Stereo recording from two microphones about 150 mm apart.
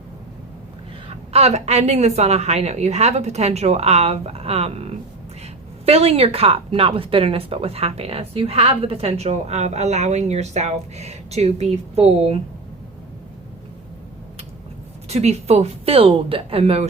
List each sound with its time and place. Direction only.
1.0 s speech: 45° right (ahead or behind)
15.1 s a woman's voice: 45° right (ahead or behind)